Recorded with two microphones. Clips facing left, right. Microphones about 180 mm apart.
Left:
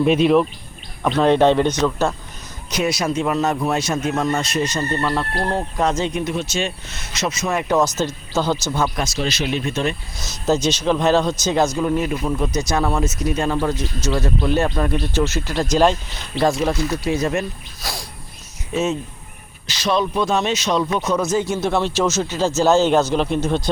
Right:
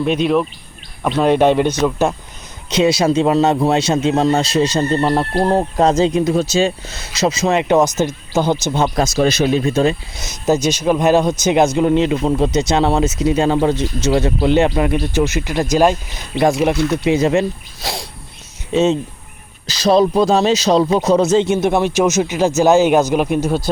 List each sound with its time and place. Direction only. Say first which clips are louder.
0.0 s speech: left 1 dB; centre (ahead or behind); by 2.1 s 15° right (ahead or behind)
2.6 s speech: right 7 dB; 25° right (ahead or behind)
9.0 s speech: right 8 dB; 50° right (ahead or behind)
10.2 s speech: right 3 dB; 15° right (ahead or behind)
14.8 s speech: right 4 dB; 15° right (ahead or behind)